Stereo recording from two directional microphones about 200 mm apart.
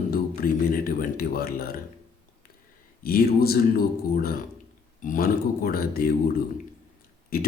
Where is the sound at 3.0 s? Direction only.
50° left (ahead or behind).